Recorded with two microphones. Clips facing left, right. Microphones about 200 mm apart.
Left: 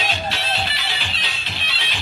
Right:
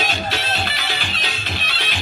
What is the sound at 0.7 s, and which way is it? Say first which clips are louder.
Music: right 3 dB; 50° right (ahead or behind).